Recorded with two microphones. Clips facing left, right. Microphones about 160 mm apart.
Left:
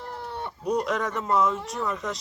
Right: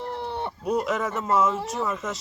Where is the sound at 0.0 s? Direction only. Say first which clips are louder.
Right 4 dB; 25° right (ahead or behind).